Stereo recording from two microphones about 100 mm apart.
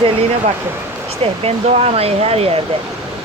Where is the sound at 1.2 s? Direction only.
90° right.